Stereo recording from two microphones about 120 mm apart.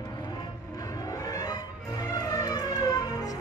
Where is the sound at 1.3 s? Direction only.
35° left (ahead or behind).